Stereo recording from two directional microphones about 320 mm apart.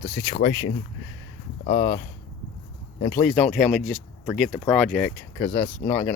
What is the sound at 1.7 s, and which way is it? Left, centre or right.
Speech, left.